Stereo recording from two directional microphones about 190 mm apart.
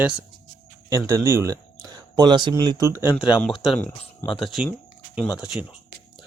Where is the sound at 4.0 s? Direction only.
25° left (ahead or behind).